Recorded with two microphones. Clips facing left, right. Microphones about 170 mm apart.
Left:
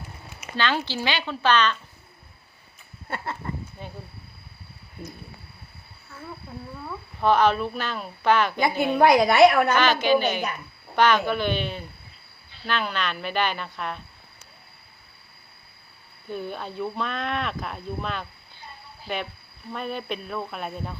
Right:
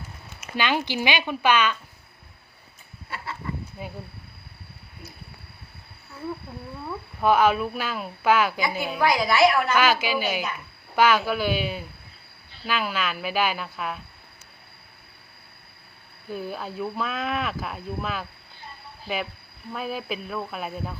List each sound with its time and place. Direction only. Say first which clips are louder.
0.5 s speech: right 1 dB; 15° right (ahead or behind)
3.8 s speech: right 3 dB; 10° right (ahead or behind)
6.8 s speech: even; 5° right (ahead or behind)
9.0 s a woman's voice: left 4 dB; 50° left (ahead or behind)
9.7 s speech: left 2 dB; 5° right (ahead or behind)
16.3 s speech: even; 5° right (ahead or behind)